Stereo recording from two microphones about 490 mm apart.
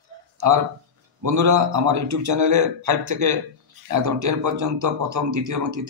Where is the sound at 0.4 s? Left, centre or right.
Right.